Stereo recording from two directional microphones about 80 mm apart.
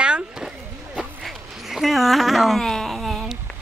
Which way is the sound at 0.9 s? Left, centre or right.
Centre.